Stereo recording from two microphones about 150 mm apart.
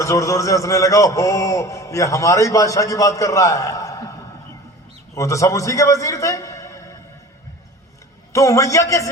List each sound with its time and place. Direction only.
0.0 s a man's voice: 20° left (ahead or behind)
5.1 s a man's voice: 20° left (ahead or behind)
8.3 s a man's voice: 20° left (ahead or behind)